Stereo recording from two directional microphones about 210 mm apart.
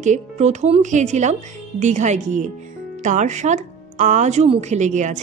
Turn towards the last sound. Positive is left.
turn(degrees=-35)  # may be behind; listen again after turning